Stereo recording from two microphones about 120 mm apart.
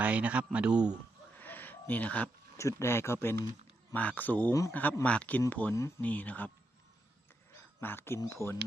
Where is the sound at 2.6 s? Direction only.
25° left (ahead or behind).